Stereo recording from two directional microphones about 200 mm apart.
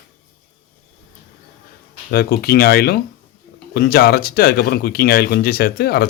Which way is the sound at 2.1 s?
50° left (ahead or behind).